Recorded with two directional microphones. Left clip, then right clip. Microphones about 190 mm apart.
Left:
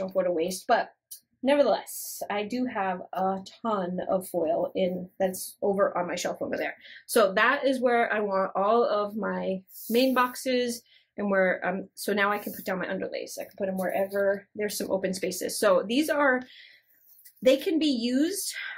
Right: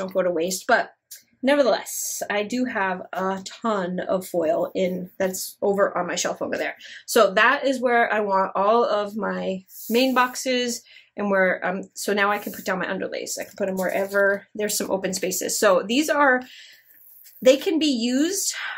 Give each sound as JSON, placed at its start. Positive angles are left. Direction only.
{"t": 0.0, "sound": "a woman's voice", "side_deg": -30}
{"t": 1.4, "sound": "a woman's voice", "side_deg": -20}